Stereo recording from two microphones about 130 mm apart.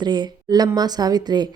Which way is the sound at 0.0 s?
35° right (ahead or behind).